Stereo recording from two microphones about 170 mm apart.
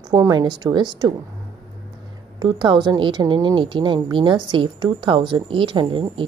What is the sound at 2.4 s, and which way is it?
Speech, 25° right (ahead or behind).